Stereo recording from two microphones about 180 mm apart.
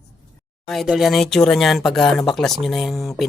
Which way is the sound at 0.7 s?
Centre (ahead or behind).